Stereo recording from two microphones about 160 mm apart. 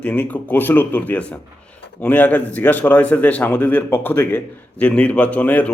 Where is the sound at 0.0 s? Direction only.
10° left (ahead or behind).